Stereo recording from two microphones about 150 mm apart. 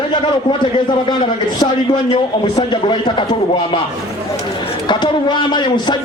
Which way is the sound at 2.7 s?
35° left (ahead or behind).